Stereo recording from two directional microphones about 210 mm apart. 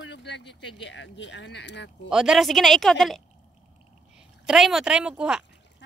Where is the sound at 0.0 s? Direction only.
55° left (ahead or behind).